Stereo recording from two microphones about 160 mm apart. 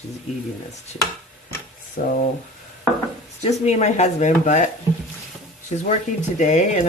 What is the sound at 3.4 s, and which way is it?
Speech, 45° left (ahead or behind).